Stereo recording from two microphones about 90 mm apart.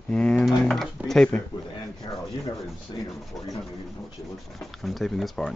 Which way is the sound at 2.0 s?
60° left (ahead or behind).